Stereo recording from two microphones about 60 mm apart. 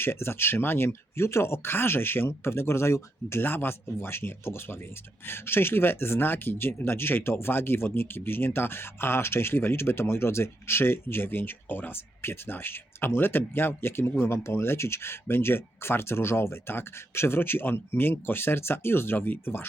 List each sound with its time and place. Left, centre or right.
0.0 s speech: left